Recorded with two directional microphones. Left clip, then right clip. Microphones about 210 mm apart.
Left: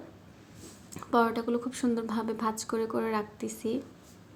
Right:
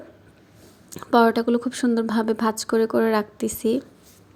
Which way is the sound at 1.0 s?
30° right (ahead or behind).